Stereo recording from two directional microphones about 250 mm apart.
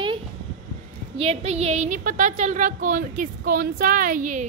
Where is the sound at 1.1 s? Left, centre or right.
Right.